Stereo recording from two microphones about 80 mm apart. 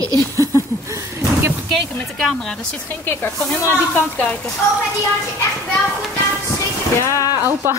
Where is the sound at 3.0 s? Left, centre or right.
Left.